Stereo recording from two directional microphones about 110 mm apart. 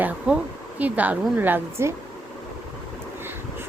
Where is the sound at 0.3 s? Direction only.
10° right (ahead or behind).